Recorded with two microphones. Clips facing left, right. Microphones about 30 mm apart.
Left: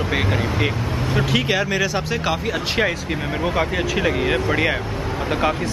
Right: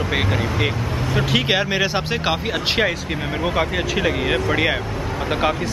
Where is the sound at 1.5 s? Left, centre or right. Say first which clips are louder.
Right 1 dB; right.